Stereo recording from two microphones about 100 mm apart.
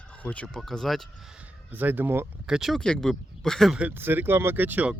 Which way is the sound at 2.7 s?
5° left (ahead or behind).